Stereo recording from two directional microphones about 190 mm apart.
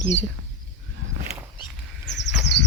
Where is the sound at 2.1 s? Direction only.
70° left (ahead or behind).